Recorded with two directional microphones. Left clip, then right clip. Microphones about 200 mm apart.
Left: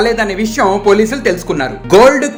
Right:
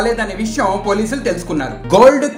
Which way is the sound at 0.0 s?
35° left (ahead or behind).